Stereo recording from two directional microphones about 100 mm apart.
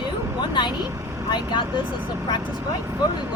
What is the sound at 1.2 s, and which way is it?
Speech, 45° left (ahead or behind).